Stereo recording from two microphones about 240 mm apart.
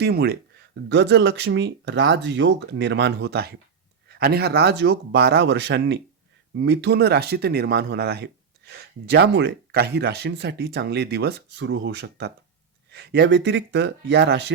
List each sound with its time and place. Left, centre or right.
0.0 s speech: right